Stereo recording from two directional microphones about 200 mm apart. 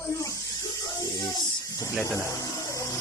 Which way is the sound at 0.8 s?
20° left (ahead or behind).